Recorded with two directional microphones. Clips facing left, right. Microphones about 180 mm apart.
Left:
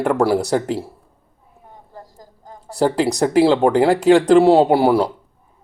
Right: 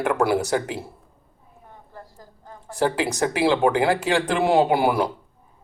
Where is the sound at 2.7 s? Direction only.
35° left (ahead or behind).